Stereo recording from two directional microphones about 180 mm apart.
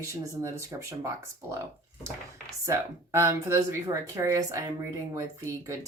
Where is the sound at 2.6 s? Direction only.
15° right (ahead or behind).